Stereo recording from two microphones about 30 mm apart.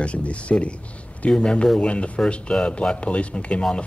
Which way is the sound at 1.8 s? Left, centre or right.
Left.